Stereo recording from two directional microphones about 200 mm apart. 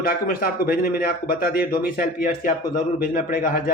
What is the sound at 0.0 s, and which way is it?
A man's voice, 45° left (ahead or behind).